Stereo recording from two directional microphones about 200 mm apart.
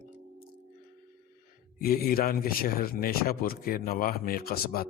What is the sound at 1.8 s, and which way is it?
A man's voice, 50° left (ahead or behind).